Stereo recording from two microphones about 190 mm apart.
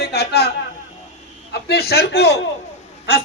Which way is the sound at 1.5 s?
55° left (ahead or behind).